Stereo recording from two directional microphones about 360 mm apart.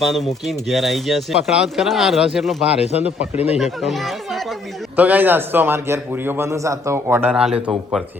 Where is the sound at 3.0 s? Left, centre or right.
Centre.